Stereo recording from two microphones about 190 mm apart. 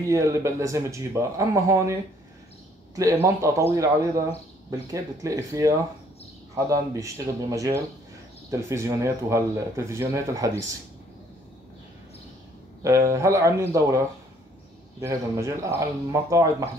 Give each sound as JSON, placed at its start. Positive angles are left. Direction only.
{"t": 0.1, "sound": "speech", "side_deg": -15}
{"t": 3.0, "sound": "speech", "side_deg": -15}
{"t": 12.8, "sound": "speech", "side_deg": -15}